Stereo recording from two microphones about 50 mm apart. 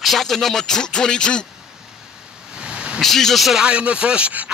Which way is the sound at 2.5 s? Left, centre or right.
Right.